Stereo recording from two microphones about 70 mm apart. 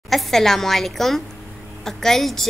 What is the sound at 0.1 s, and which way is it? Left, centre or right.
A woman's voice, centre.